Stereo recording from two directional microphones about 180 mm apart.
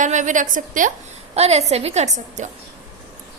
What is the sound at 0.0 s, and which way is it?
Speech, 45° right (ahead or behind).